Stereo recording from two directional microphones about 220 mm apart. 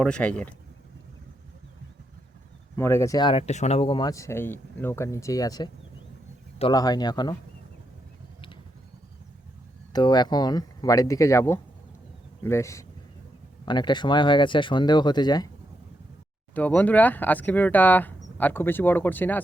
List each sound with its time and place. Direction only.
0.0 s speech: 5° left (ahead or behind)
2.7 s speech: 10° left (ahead or behind)
9.9 s speech: 20° left (ahead or behind)
16.6 s speech: 5° left (ahead or behind)